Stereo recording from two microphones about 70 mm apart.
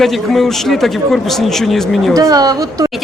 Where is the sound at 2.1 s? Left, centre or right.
Right.